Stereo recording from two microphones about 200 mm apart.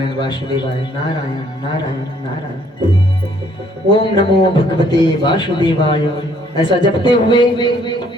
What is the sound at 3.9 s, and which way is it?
A man's voice, 25° left (ahead or behind).